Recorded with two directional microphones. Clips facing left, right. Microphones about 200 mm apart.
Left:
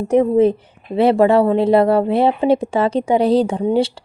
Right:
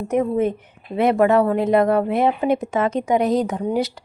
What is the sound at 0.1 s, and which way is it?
A woman's voice, 30° left (ahead or behind).